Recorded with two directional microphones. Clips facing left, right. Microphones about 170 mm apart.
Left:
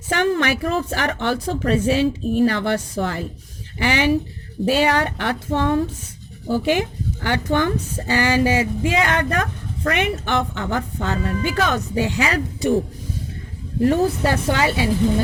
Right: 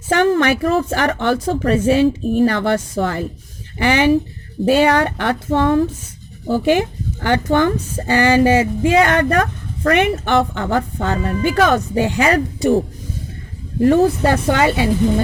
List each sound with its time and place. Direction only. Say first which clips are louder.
0.1 s speech: right 5 dB; 50° right (ahead or behind)
14.3 s speech: right 4 dB; 55° right (ahead or behind)